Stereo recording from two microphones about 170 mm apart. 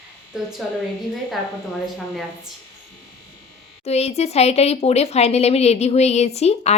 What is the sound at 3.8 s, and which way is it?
Speech, 40° left (ahead or behind).